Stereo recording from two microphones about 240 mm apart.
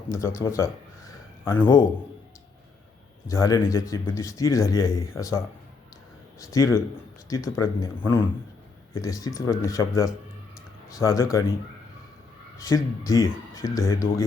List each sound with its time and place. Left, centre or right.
0.1 s speech: centre
3.2 s a man's voice: centre
6.4 s a man's voice: centre
12.6 s a man's voice: centre